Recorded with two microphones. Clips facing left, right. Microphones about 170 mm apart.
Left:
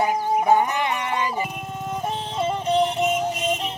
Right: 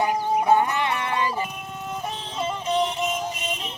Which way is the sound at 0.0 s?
15° left (ahead or behind).